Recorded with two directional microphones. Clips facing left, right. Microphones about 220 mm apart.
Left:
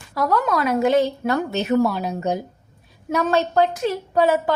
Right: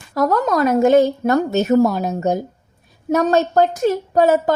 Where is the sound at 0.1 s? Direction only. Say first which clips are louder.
Right 4 dB; 45° right (ahead or behind).